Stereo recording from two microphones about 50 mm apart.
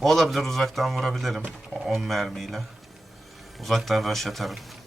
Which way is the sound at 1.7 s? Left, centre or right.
Centre.